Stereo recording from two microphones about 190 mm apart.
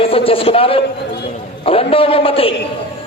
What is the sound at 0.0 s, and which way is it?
A man's voice, 30° left (ahead or behind).